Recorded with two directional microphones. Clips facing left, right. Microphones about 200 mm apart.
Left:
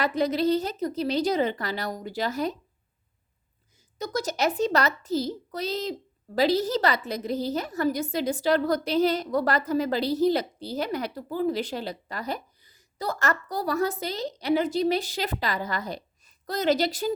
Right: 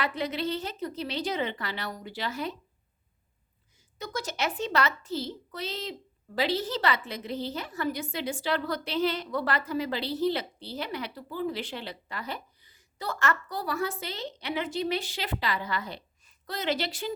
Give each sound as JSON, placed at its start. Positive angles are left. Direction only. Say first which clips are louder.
{"t": 0.0, "sound": "a child's voice", "louder": "left 7 dB", "side_deg": 40}
{"t": 3.9, "sound": "a child's voice", "louder": "left 5 dB", "side_deg": 40}